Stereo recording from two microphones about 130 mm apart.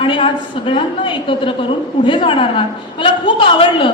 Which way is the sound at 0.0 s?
40° left (ahead or behind).